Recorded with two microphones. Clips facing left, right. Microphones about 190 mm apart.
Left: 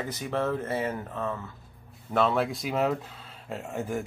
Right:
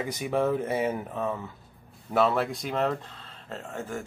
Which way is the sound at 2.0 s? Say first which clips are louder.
Right 1 dB; centre (ahead or behind).